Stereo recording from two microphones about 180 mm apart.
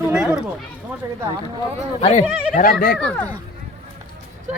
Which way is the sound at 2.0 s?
35° left (ahead or behind).